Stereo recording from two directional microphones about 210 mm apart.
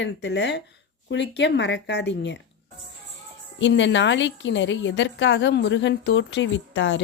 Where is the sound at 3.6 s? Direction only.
60° left (ahead or behind).